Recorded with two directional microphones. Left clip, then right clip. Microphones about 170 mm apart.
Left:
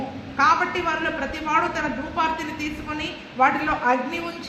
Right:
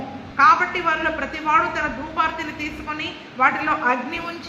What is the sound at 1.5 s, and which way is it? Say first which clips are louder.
A woman's voice: right 3 dB; 35° left (ahead or behind).